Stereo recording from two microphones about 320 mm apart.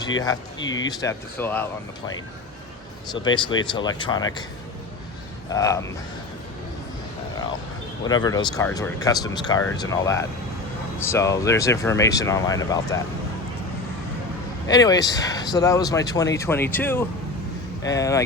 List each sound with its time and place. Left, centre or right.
0.3 s speech: centre
3.1 s speech: centre
5.5 s speech: centre
8.0 s speech: centre
14.7 s speech: centre